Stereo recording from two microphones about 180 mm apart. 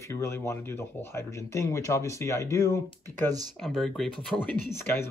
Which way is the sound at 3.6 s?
Centre (ahead or behind).